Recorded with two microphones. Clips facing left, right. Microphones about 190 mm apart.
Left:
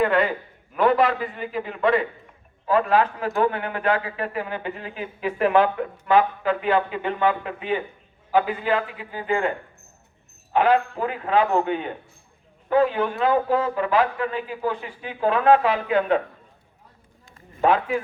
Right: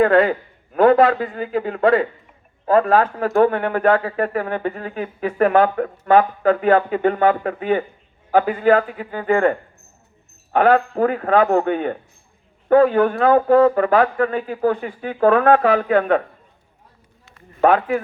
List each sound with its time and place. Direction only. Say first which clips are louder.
0.0 s a man's voice: right 6 dB; 40° right (ahead or behind)
17.6 s a man's voice: right 4 dB; 50° right (ahead or behind)